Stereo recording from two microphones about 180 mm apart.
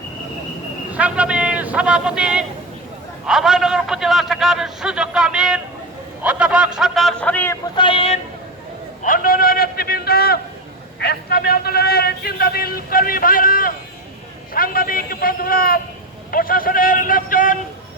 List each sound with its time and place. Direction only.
0.9 s a man's voice: 5° right (ahead or behind); by 7.6 s 10° left (ahead or behind)
7.8 s speech: 30° left (ahead or behind)
9.0 s a sound: 50° left (ahead or behind)
11.0 s a man's voice: 65° left (ahead or behind)